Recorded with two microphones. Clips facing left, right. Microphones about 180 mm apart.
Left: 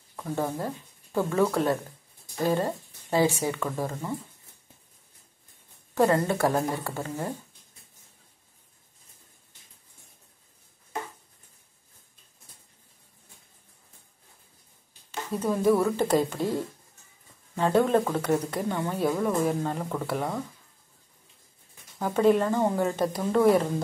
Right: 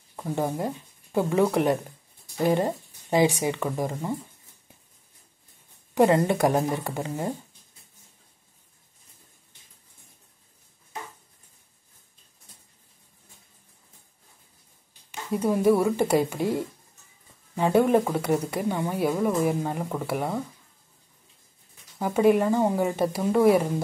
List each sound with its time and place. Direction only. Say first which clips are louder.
0.1 s speech: right 2 dB; 20° right (ahead or behind)
5.9 s speech: right 3 dB; 15° right (ahead or behind)
15.0 s speech: right 3 dB; 10° right (ahead or behind)
21.9 s speech: right 1 dB; 10° right (ahead or behind)